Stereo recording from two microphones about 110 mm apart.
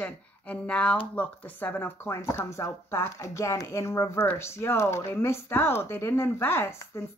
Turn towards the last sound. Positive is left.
turn(degrees=25)  # may be behind; listen again after turning